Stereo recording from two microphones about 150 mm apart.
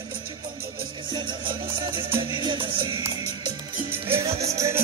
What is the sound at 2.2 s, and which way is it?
Music, 30° right (ahead or behind).